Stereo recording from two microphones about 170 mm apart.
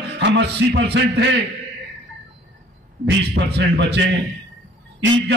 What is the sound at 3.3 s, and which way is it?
Speech, 90° right.